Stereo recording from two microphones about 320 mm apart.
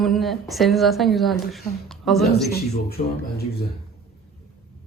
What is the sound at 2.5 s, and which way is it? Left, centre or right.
Speech, left.